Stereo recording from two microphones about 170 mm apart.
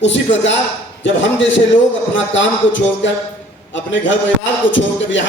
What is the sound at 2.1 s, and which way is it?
Speech, 90° left.